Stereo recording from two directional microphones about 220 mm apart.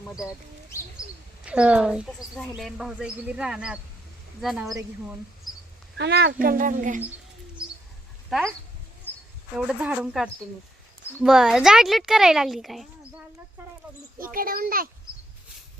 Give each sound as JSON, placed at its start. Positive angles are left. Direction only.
{"t": 1.5, "sound": "speech", "side_deg": -5}
{"t": 4.7, "sound": "speech", "side_deg": -15}
{"t": 6.0, "sound": "speech", "side_deg": -50}
{"t": 8.3, "sound": "speech", "side_deg": 0}
{"t": 9.6, "sound": "speech", "side_deg": -5}
{"t": 14.2, "sound": "speech", "side_deg": -40}